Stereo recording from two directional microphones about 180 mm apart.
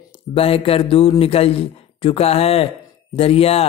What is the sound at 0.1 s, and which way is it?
Speech, 30° left (ahead or behind).